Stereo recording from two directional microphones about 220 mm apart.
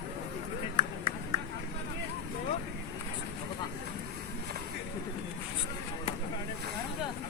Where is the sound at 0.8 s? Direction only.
25° right (ahead or behind).